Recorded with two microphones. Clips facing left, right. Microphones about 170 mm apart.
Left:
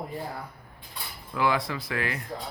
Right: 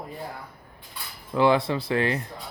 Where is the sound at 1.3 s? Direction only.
25° right (ahead or behind).